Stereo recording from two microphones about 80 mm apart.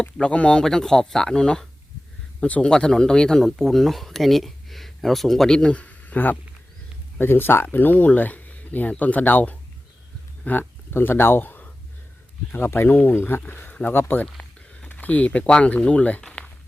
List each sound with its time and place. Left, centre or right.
0.0 s speech: centre
14.3 s speech: centre
16.2 s a sound: centre